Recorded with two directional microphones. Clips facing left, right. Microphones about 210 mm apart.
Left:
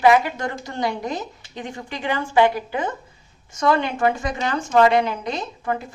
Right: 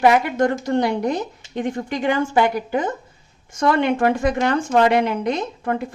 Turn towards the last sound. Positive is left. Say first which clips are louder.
# right 3 dB
turn(degrees=-55)  # may be behind; listen again after turning